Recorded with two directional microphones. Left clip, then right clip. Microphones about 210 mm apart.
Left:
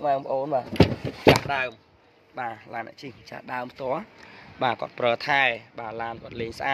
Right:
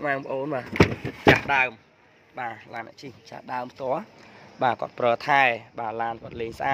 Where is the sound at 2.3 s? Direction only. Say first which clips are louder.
Left 1 dB; 5° left (ahead or behind).